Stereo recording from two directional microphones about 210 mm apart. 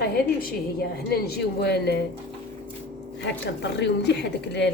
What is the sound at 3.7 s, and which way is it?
Speech, 55° left (ahead or behind).